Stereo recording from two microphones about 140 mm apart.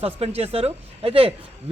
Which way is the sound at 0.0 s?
45° right (ahead or behind).